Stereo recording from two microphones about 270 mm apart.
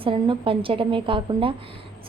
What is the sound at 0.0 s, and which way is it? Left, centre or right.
A woman's voice, centre.